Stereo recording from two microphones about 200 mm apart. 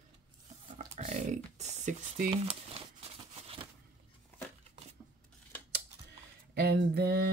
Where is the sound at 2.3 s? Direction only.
30° right (ahead or behind).